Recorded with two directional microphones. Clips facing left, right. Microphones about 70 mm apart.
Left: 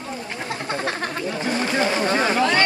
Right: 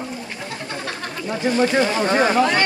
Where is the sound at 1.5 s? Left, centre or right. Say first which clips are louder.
Right 4 dB; right.